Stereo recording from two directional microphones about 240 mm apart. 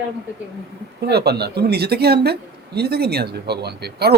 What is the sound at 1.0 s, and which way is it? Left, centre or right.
Speech, right.